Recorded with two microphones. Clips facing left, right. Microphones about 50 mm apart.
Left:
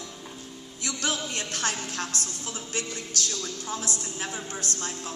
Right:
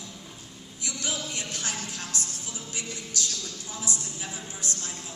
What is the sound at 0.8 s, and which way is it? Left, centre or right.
A woman's voice, left.